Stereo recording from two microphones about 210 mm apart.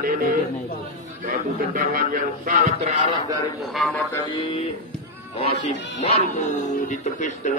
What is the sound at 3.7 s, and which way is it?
Speech, centre (ahead or behind).